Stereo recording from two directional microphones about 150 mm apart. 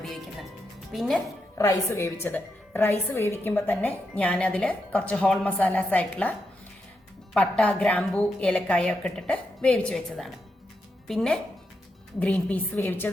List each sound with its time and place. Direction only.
0.0 s music: centre (ahead or behind)
0.9 s speech: centre (ahead or behind)
1.5 s a woman's voice: 20° left (ahead or behind)
7.3 s a woman's voice: 5° left (ahead or behind)